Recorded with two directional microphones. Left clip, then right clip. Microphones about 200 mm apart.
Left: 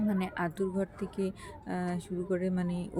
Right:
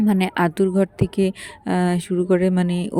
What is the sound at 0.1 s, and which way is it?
Speech, 50° right (ahead or behind).